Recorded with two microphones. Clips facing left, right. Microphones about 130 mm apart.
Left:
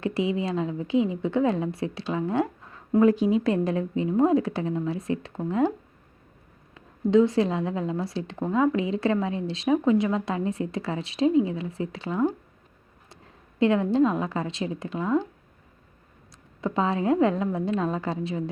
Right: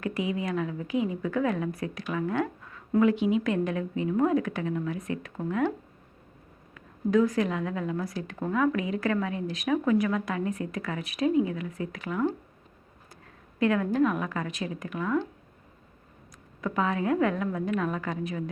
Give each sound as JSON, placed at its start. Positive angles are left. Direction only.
{"t": 0.0, "sound": "a woman's voice", "side_deg": 30}
{"t": 6.7, "sound": "a woman's voice", "side_deg": 25}
{"t": 13.6, "sound": "a woman's voice", "side_deg": 25}
{"t": 16.6, "sound": "a woman's voice", "side_deg": 30}